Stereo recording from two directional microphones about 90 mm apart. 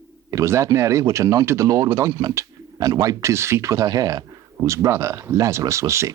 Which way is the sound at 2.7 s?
45° right (ahead or behind).